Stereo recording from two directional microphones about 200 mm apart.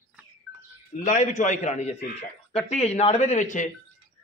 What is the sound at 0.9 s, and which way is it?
A man's voice, 40° left (ahead or behind).